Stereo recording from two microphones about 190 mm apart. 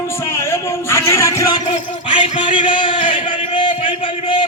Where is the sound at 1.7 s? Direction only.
30° left (ahead or behind).